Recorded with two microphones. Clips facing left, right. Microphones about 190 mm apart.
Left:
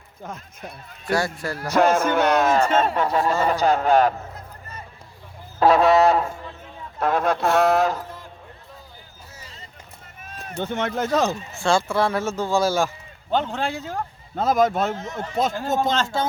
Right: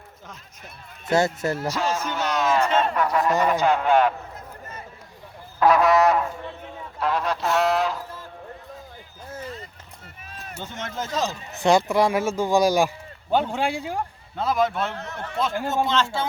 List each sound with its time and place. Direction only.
0.2 s speech: 50° left (ahead or behind)
1.0 s speech: 20° right (ahead or behind)
1.7 s music: 55° left (ahead or behind)
2.6 s speech: 45° left (ahead or behind)
2.9 s goose: 30° left (ahead or behind)
3.4 s a man's voice: 35° left (ahead or behind)
5.5 s goose: 30° left (ahead or behind)
7.0 s speech: 50° left (ahead or behind)
9.3 s a sound: 55° right (ahead or behind)
10.6 s music: 60° left (ahead or behind)
11.5 s speech: 20° right (ahead or behind)
14.3 s speech: 45° left (ahead or behind)
15.0 s speech: 15° left (ahead or behind)
15.7 s speech: 45° left (ahead or behind)